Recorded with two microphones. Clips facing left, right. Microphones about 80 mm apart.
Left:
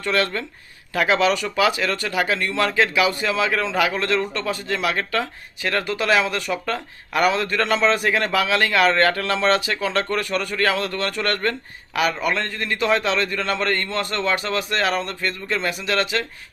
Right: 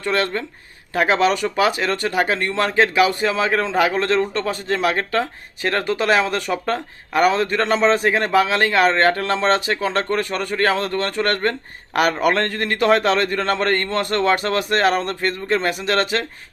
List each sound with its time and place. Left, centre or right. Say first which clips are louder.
0.0 s a man's voice: right 1 dB; right
12.2 s a man's voice: right 5 dB; right